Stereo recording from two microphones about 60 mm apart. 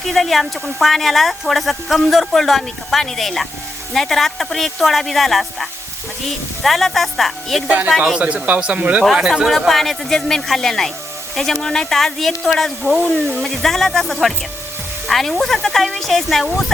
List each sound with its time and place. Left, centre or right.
0.1 s speech: centre
7.9 s a man's voice: centre
9.2 s speech: centre